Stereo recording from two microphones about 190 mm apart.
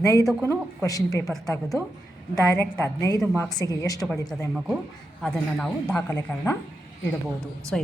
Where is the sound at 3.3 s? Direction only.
Centre (ahead or behind).